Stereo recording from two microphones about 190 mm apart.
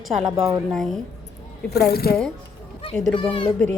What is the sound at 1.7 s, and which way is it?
Speech, 55° left (ahead or behind).